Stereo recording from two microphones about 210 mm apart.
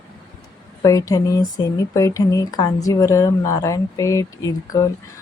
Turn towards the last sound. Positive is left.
turn(degrees=15)  # may be behind; listen again after turning